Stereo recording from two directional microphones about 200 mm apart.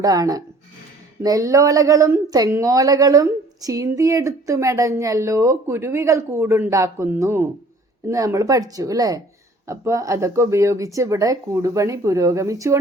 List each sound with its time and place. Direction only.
0.0 s speech: 15° right (ahead or behind)